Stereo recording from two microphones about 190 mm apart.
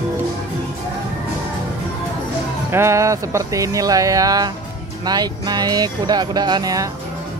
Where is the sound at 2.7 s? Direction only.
15° right (ahead or behind).